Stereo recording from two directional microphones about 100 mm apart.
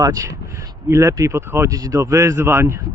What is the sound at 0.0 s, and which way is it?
Speech, 35° right (ahead or behind).